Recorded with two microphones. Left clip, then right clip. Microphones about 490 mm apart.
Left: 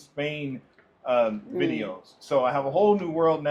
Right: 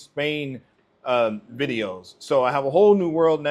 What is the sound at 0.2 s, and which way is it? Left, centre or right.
A man's voice, right.